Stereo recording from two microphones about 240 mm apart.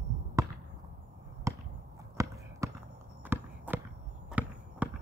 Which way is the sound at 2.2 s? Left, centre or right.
Centre.